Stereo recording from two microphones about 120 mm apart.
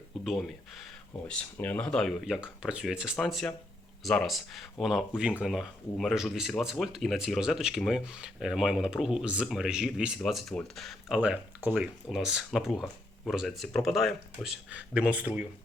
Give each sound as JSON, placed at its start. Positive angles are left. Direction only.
{"t": 0.1, "sound": "a sound", "side_deg": 0}
{"t": 1.3, "sound": "speech", "side_deg": 10}
{"t": 11.2, "sound": "speech", "side_deg": -10}